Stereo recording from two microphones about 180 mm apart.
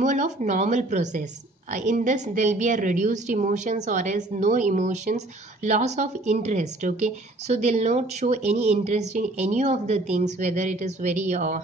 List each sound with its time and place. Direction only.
0.0 s a woman's voice: 40° right (ahead or behind)